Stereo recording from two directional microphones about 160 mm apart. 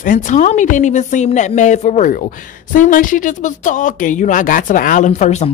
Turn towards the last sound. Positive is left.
turn(degrees=45)  # may be behind; listen again after turning